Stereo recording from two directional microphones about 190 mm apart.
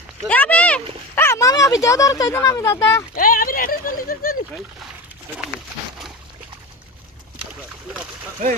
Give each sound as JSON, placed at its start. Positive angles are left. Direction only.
{"t": 0.3, "sound": "speech", "side_deg": 10}
{"t": 3.2, "sound": "speech", "side_deg": 45}